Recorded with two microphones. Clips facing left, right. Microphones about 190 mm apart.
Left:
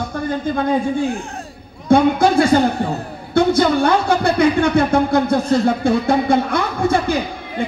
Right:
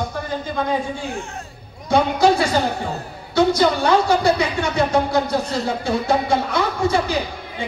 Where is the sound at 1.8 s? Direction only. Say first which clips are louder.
Left 3 dB; 55° left (ahead or behind).